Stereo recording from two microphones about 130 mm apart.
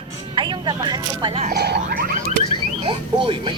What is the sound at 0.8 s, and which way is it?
Speech, 35° right (ahead or behind).